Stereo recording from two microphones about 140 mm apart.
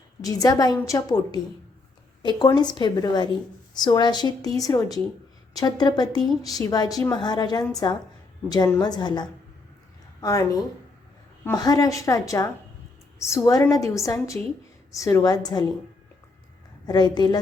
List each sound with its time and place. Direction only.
0.2 s a woman's voice: 25° left (ahead or behind)
2.6 s a woman's voice: 30° left (ahead or behind)
16.8 s a woman's voice: 30° left (ahead or behind)